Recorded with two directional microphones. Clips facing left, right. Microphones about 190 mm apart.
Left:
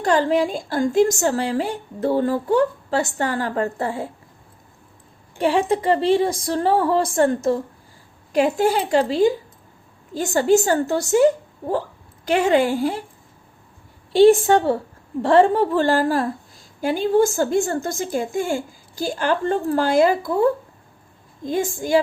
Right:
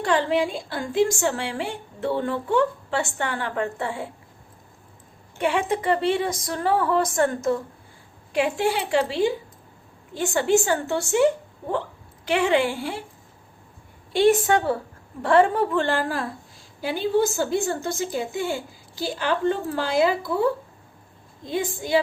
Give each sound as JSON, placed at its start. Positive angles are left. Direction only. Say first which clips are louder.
{"t": 0.0, "sound": "a woman's voice", "louder": "left 3 dB", "side_deg": 40}
{"t": 5.4, "sound": "a woman's voice", "louder": "left 4 dB", "side_deg": 35}
{"t": 14.1, "sound": "a woman's voice", "louder": "left 6 dB", "side_deg": 30}